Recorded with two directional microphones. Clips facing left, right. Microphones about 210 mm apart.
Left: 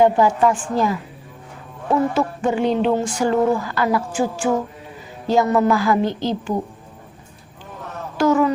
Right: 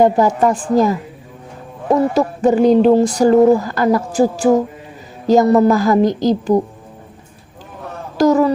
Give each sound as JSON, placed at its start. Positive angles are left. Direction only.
{"t": 0.0, "sound": "speech", "side_deg": -40}
{"t": 8.2, "sound": "speech", "side_deg": -40}